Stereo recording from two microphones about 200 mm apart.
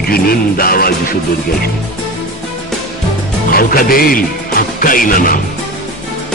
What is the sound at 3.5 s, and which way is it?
Speech, 45° left (ahead or behind).